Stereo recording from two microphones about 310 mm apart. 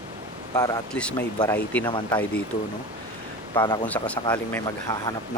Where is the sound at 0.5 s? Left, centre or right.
Centre.